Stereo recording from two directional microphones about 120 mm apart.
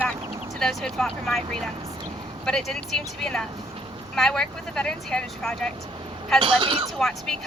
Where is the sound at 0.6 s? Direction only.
5° left (ahead or behind).